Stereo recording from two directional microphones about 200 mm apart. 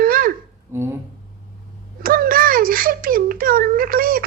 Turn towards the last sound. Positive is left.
turn(degrees=-45)  # may be behind; listen again after turning